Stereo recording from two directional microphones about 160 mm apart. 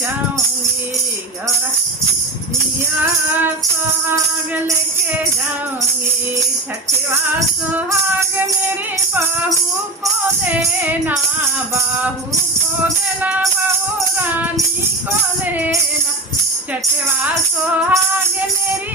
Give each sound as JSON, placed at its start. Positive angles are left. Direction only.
{"t": 3.0, "sound": "music", "side_deg": -10}
{"t": 7.1, "sound": "music", "side_deg": -15}
{"t": 10.5, "sound": "music", "side_deg": -10}
{"t": 13.2, "sound": "music", "side_deg": -10}
{"t": 17.8, "sound": "music", "side_deg": -15}